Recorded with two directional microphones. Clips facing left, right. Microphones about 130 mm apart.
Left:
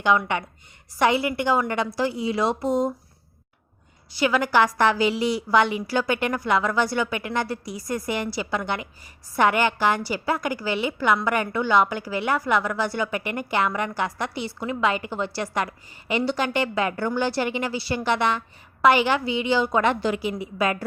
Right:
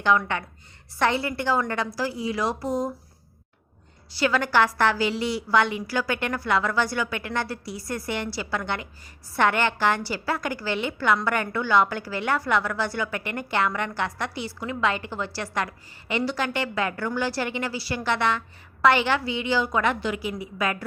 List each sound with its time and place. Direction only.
0.0 s a woman's voice: 15° left (ahead or behind)
4.1 s a woman's voice: 15° left (ahead or behind)